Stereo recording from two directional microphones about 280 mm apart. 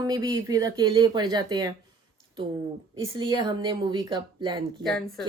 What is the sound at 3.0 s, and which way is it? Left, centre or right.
A woman's voice, centre.